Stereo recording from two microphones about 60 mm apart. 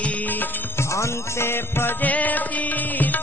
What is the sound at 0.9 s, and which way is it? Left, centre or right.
Music, left.